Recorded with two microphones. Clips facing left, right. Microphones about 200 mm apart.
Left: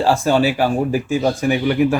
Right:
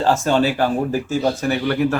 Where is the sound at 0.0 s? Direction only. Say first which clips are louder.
Left 1 dB; 10° left (ahead or behind).